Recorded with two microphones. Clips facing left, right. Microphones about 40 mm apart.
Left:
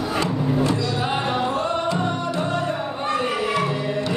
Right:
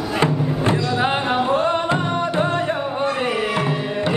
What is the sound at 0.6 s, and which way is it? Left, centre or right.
Music, right.